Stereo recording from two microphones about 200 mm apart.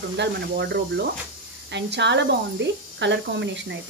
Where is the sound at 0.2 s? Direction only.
55° right (ahead or behind).